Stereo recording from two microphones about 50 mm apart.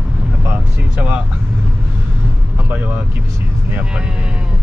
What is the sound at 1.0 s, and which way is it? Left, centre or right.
Speech, right.